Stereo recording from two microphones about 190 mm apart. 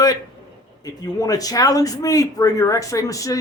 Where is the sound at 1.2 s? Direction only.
20° left (ahead or behind).